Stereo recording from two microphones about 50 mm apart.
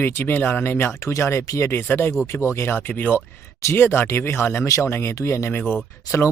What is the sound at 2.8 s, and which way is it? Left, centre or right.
Speech, left.